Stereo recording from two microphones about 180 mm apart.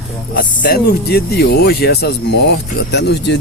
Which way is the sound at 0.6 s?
60° left (ahead or behind).